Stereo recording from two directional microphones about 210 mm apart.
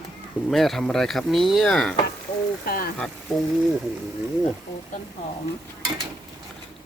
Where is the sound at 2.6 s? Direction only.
45° left (ahead or behind).